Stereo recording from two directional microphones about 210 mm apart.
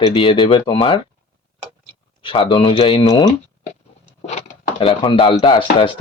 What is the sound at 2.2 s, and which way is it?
Speech, 25° left (ahead or behind).